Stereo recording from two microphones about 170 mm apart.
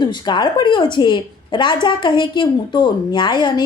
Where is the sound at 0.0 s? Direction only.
25° left (ahead or behind).